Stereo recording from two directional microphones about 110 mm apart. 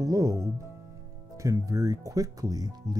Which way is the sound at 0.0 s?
30° right (ahead or behind).